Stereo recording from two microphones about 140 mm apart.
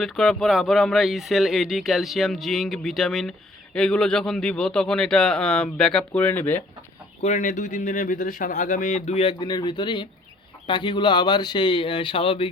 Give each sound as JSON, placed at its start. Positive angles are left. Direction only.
{"t": 0.0, "sound": "speech", "side_deg": 0}
{"t": 7.2, "sound": "speech", "side_deg": 60}
{"t": 9.4, "sound": "speech", "side_deg": 30}